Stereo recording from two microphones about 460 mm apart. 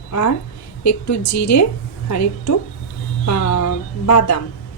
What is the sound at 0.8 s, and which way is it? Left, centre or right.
A woman's voice, left.